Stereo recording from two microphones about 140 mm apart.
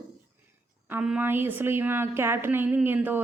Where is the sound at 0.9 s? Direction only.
10° right (ahead or behind).